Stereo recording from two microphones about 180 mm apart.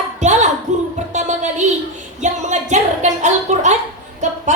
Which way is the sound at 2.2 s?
40° right (ahead or behind).